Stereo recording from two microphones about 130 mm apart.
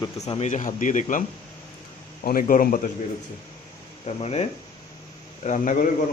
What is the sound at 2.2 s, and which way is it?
Speech, 90° left.